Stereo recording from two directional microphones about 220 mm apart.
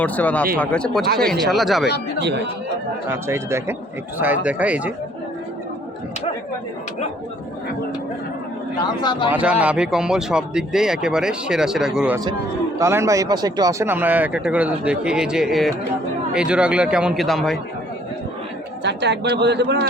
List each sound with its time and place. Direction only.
0.0 s speech: 5° left (ahead or behind)
1.0 s speech: 45° right (ahead or behind)
1.3 s speech: centre (ahead or behind)
3.1 s speech: 10° right (ahead or behind)
8.8 s speech: 20° left (ahead or behind)
9.3 s speech: 5° right (ahead or behind)
18.8 s speech: 50° right (ahead or behind)